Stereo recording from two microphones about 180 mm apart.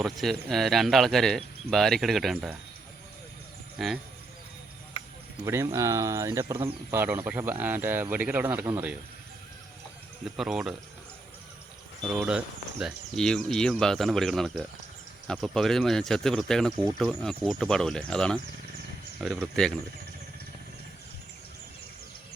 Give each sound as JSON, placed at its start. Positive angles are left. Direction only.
{"t": 0.0, "sound": "speech", "side_deg": 0}
{"t": 3.8, "sound": "speech", "side_deg": 0}
{"t": 5.5, "sound": "speech", "side_deg": -15}
{"t": 10.3, "sound": "speech", "side_deg": -5}
{"t": 12.0, "sound": "speech", "side_deg": -5}
{"t": 16.7, "sound": "speech", "side_deg": -25}
{"t": 17.0, "sound": "speech", "side_deg": 0}